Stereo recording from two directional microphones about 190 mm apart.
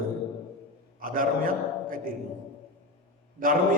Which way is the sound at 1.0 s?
45° right (ahead or behind).